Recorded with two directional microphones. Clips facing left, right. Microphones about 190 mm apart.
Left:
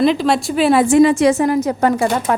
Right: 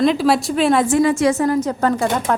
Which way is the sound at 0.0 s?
Centre (ahead or behind).